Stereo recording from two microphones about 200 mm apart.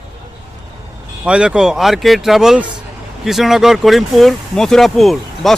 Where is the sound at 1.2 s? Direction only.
5° right (ahead or behind).